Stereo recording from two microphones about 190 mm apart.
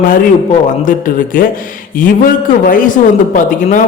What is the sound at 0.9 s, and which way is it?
Music, 45° left (ahead or behind).